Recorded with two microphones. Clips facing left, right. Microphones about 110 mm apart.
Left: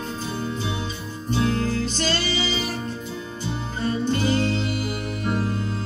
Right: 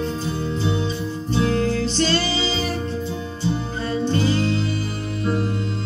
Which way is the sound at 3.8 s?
35° right (ahead or behind).